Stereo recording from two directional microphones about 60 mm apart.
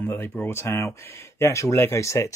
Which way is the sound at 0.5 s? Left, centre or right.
Left.